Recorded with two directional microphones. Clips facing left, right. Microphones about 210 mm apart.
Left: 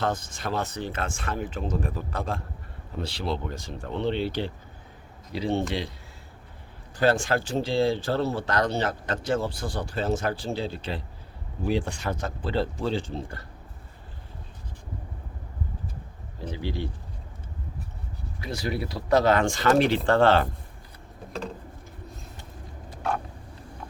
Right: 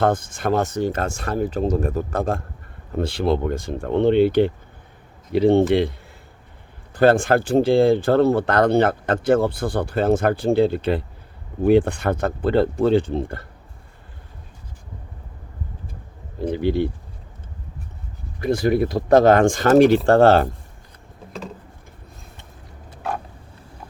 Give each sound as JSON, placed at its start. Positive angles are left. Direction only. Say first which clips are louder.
{"t": 0.0, "sound": "speech", "louder": "right 9 dB", "side_deg": -50}
{"t": 6.9, "sound": "speech", "louder": "right 8 dB", "side_deg": -55}
{"t": 16.5, "sound": "speech", "louder": "right 12 dB", "side_deg": -55}
{"t": 18.3, "sound": "speech", "louder": "right 12 dB", "side_deg": -50}